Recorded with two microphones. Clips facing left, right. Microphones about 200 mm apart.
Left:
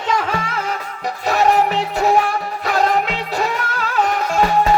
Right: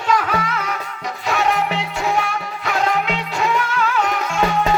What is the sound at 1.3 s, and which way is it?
Music, 35° left (ahead or behind).